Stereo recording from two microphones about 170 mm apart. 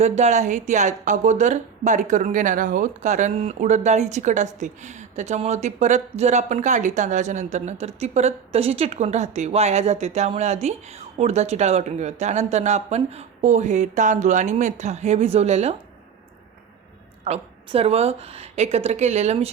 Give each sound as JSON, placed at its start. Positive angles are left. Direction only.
{"t": 0.0, "sound": "speech", "side_deg": -40}
{"t": 17.2, "sound": "speech", "side_deg": -40}